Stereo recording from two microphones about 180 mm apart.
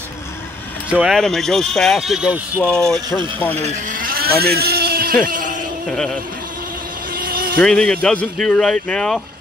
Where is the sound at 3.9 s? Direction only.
50° right (ahead or behind).